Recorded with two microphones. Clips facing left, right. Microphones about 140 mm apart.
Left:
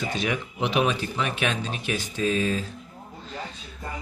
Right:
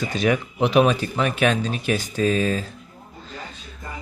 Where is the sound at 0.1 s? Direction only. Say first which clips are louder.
Right 6 dB; 40° right (ahead or behind).